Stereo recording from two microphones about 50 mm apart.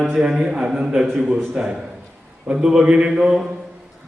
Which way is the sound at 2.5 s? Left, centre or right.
Centre.